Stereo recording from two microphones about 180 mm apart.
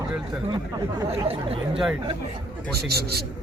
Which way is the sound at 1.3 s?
30° right (ahead or behind).